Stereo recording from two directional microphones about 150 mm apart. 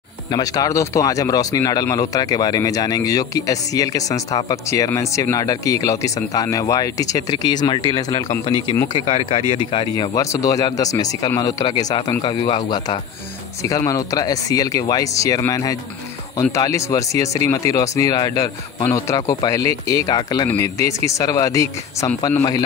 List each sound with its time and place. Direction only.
0.3 s speech: 25° left (ahead or behind)
9.1 s speech: 45° left (ahead or behind)
9.9 s speech: 25° left (ahead or behind)